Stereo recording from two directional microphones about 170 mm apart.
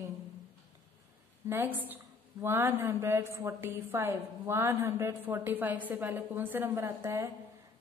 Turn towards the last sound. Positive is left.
turn(degrees=-15)  # may be behind; listen again after turning